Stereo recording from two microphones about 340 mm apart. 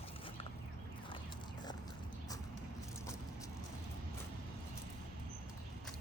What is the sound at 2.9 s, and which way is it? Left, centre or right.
Vehicle, centre.